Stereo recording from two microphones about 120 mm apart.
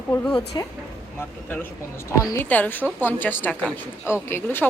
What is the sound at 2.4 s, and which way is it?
A woman's voice, 15° left (ahead or behind).